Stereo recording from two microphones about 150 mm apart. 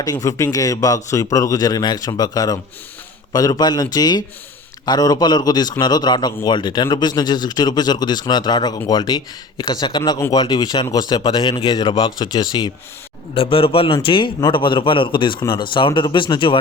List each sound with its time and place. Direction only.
0.0 s a man's voice: 25° left (ahead or behind)